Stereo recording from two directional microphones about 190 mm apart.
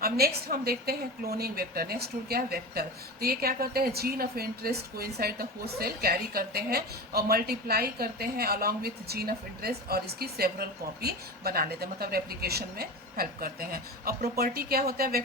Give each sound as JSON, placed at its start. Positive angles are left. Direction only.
{"t": 0.0, "sound": "a woman's voice", "side_deg": -55}